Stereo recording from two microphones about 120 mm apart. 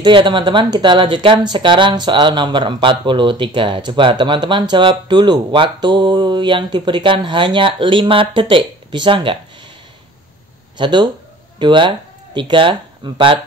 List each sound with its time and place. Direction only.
0.0 s speech: 45° right (ahead or behind)
10.8 s speech: 40° right (ahead or behind)